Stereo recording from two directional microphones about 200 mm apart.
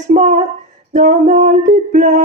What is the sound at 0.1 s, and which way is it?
Speech, 35° right (ahead or behind).